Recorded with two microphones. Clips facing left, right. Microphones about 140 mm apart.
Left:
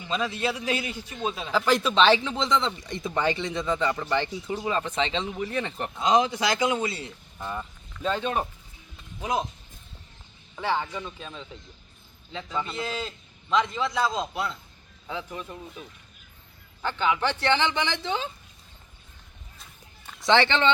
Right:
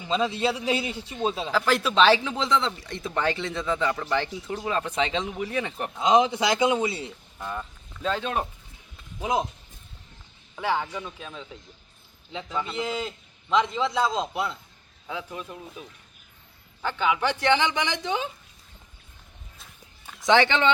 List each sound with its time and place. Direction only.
0.1 s a man's voice: 25° right (ahead or behind)
1.5 s speech: centre (ahead or behind)
6.0 s a man's voice: 20° right (ahead or behind)
7.3 s speech: 5° left (ahead or behind)
9.2 s speech: 15° right (ahead or behind)
10.5 s speech: 5° right (ahead or behind)
12.3 s a man's voice: 15° right (ahead or behind)
15.0 s speech: 5° right (ahead or behind)
20.1 s speech: 10° right (ahead or behind)